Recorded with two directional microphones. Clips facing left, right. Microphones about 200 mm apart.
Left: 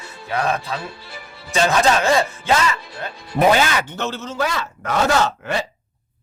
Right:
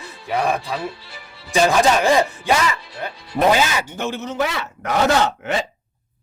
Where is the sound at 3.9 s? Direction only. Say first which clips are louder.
Right 1 dB; 15° right (ahead or behind).